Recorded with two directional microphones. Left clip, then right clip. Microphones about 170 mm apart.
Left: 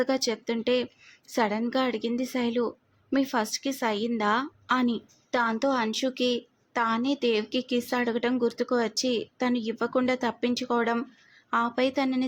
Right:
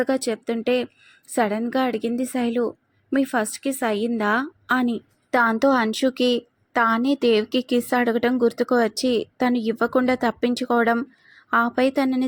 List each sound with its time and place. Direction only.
0.0 s a woman's voice: 15° right (ahead or behind)
5.3 s a woman's voice: 35° right (ahead or behind)